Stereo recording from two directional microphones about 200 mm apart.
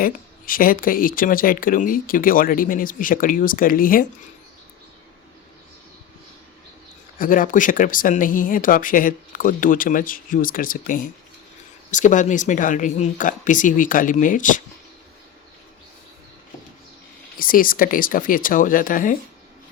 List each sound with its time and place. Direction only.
0.0 s speech: 45° left (ahead or behind)
7.2 s speech: 45° left (ahead or behind)
17.3 s speech: 45° left (ahead or behind)